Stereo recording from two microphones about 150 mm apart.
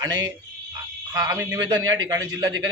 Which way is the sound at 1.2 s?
20° right (ahead or behind).